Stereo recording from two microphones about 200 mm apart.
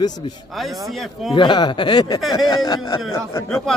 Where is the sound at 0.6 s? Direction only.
Centre (ahead or behind).